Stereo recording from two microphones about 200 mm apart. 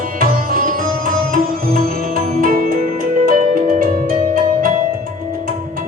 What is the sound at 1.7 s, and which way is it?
Music, 45° right (ahead or behind).